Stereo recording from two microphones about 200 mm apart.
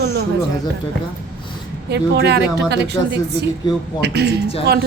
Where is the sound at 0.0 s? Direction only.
55° right (ahead or behind).